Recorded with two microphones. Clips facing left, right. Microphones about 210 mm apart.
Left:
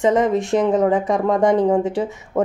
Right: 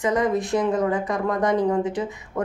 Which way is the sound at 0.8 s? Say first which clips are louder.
Left 5 dB; 25° left (ahead or behind).